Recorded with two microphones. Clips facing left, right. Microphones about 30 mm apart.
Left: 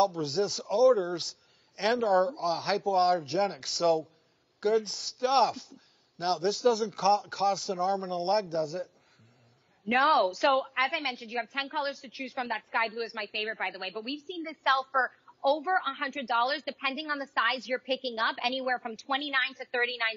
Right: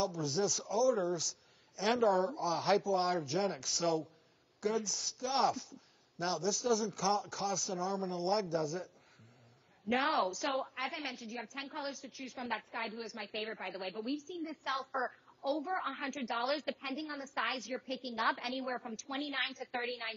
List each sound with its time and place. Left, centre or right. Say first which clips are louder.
0.0 s speech: left 7 dB; left
14.3 s a woman's voice: left 10 dB; left
15.8 s a woman's voice: left 5 dB; left